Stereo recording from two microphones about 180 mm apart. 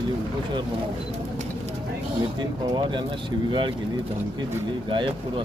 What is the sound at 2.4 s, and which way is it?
Speech, 25° right (ahead or behind).